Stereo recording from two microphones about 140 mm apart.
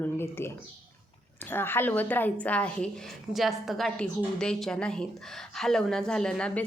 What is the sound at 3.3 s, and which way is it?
A woman's voice, centre (ahead or behind).